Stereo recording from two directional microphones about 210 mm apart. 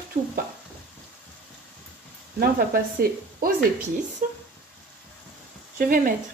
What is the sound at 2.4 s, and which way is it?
A woman's voice, 45° right (ahead or behind).